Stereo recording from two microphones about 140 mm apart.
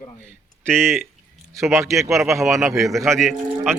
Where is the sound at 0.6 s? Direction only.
15° right (ahead or behind).